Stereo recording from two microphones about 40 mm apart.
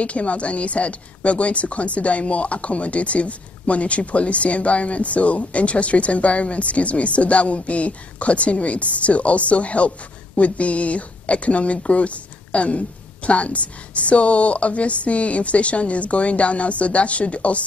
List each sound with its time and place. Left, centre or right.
0.0 s a woman's voice: left